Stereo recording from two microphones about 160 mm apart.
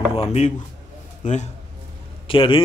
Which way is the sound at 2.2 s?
35° left (ahead or behind).